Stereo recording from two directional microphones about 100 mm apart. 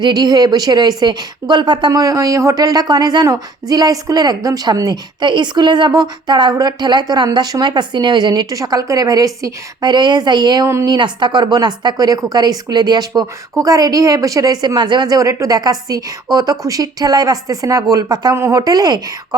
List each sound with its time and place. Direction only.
0.0 s a woman's voice: 45° right (ahead or behind)
1.9 s a woman's voice: 35° right (ahead or behind)
18.3 s speech: 25° right (ahead or behind)
18.6 s speech: 40° right (ahead or behind)